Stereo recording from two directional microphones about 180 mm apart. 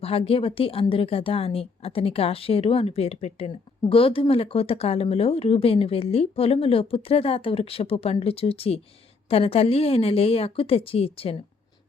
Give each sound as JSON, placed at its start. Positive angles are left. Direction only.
{"t": 0.0, "sound": "a woman's voice", "side_deg": 35}